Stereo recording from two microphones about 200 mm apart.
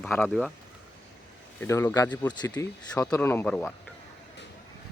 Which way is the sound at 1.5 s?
10° left (ahead or behind).